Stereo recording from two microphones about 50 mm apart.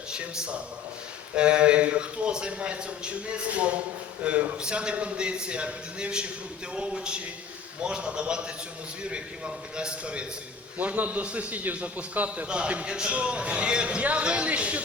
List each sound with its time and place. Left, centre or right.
0.1 s a man's voice: centre
10.8 s a man's voice: right
12.5 s a man's voice: right